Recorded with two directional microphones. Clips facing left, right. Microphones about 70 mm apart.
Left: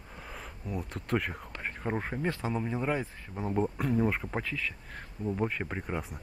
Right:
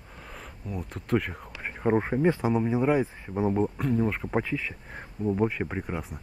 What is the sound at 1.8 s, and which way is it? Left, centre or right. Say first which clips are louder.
Speech: right 10 dB; centre.